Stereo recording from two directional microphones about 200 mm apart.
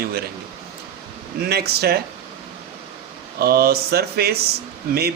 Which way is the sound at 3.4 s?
50° right (ahead or behind).